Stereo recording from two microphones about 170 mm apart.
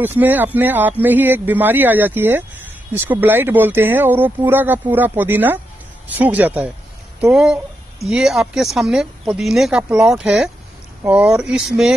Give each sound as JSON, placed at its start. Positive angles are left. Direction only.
{"t": 0.0, "sound": "speech", "side_deg": -10}